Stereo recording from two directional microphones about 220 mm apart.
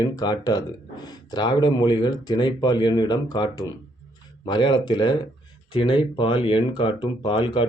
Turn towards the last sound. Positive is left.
turn(degrees=25)  # may be behind; listen again after turning